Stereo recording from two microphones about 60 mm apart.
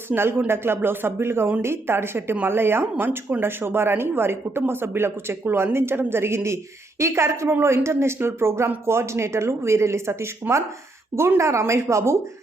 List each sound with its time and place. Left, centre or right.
0.1 s speech: right
10.4 s speech: right
11.3 s a woman's voice: right